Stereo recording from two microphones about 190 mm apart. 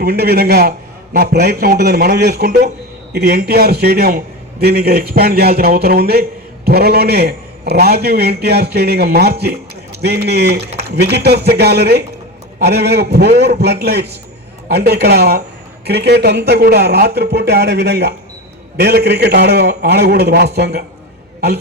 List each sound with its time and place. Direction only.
0.0 s a man's voice: 55° right (ahead or behind)